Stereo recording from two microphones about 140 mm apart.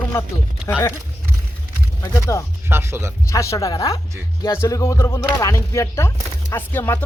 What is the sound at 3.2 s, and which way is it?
Speech, 20° left (ahead or behind).